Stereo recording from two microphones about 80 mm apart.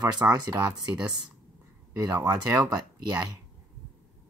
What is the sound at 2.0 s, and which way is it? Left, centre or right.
Speech, right.